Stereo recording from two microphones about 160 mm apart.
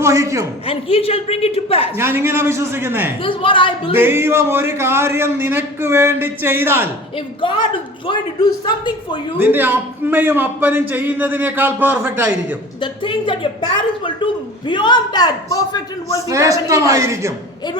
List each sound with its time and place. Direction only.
0.0 s a woman's voice: 20° right (ahead or behind)
0.7 s a woman's voice: 35° left (ahead or behind)
2.0 s a man's voice: 15° right (ahead or behind)
3.2 s a woman's voice: 35° left (ahead or behind)
3.9 s a man's voice: 15° right (ahead or behind)
8.4 s a woman's voice: 30° left (ahead or behind)
9.4 s a man's voice: 10° right (ahead or behind)
12.8 s a woman's voice: 30° left (ahead or behind)
14.7 s a woman's voice: 30° left (ahead or behind)
16.3 s a woman's voice: 20° right (ahead or behind)